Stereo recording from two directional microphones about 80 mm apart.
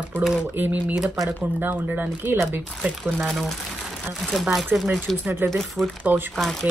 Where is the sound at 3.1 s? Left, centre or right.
Centre.